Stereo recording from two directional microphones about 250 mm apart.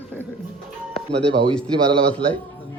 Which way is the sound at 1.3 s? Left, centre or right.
Centre.